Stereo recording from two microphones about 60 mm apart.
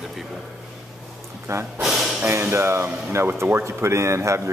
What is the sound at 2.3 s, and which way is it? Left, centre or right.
Speech, right.